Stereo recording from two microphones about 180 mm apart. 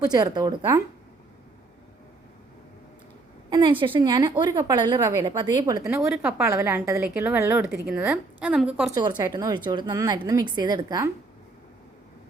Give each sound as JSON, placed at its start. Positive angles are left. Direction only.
{"t": 0.0, "sound": "speech", "side_deg": -20}
{"t": 3.5, "sound": "a woman's voice", "side_deg": -25}
{"t": 9.0, "sound": "speech", "side_deg": -25}